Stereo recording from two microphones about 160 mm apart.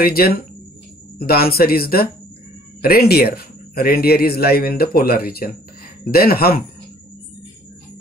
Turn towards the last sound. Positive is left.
turn(degrees=70)  # may be behind; listen again after turning